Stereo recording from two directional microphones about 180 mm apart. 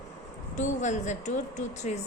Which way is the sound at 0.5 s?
40° left (ahead or behind).